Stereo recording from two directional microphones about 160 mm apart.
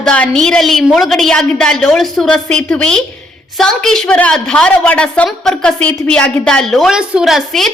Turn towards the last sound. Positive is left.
turn(degrees=0)  # may be behind; listen again after turning